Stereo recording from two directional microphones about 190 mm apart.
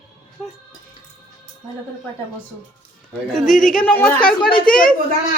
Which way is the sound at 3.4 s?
45° left (ahead or behind).